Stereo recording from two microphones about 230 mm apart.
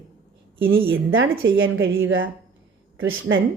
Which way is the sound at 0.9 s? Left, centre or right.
Right.